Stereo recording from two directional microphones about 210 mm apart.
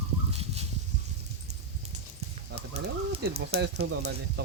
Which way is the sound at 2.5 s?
50° right (ahead or behind).